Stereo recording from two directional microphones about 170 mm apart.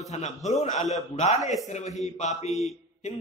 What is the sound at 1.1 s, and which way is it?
Speech, 40° left (ahead or behind).